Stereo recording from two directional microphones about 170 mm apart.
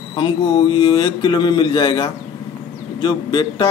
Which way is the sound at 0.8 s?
25° left (ahead or behind).